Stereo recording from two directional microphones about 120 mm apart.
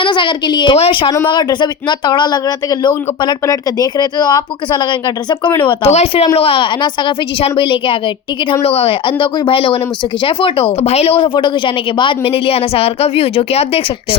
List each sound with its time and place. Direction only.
0.0 s a woman's voice: 45° left (ahead or behind)
5.9 s speech: 60° left (ahead or behind)
6.3 s a woman's voice: 50° left (ahead or behind)